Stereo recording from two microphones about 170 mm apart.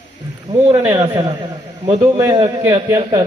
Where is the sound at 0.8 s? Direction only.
15° right (ahead or behind).